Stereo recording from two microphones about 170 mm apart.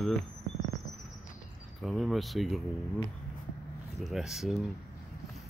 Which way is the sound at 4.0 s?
Centre (ahead or behind).